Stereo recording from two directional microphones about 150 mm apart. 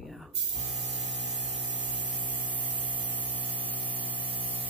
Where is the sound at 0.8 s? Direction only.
45° left (ahead or behind).